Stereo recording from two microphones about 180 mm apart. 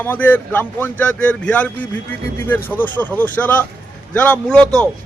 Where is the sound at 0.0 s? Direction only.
10° left (ahead or behind).